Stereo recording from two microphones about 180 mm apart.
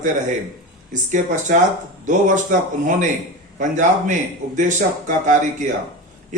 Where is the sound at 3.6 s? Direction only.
45° right (ahead or behind).